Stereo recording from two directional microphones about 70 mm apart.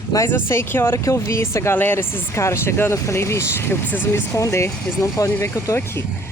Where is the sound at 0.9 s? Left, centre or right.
Left.